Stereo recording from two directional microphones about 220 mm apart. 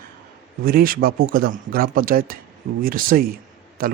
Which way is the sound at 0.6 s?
40° right (ahead or behind).